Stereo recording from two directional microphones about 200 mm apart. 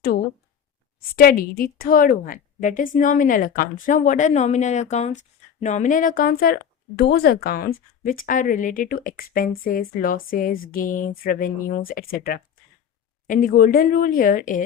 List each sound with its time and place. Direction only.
1.1 s a woman's voice: 45° left (ahead or behind)